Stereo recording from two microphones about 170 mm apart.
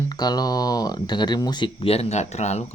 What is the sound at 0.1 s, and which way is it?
Speech, 25° left (ahead or behind).